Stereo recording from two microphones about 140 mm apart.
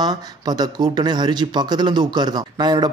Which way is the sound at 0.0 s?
30° right (ahead or behind).